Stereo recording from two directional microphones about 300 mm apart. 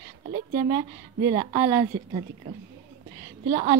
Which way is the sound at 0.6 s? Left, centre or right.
Centre.